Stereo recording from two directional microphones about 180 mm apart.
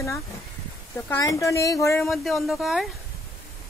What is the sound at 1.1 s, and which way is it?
Speech, 20° left (ahead or behind).